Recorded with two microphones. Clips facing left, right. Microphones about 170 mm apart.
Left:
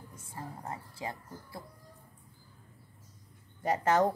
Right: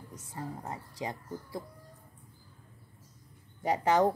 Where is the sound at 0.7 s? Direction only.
20° right (ahead or behind).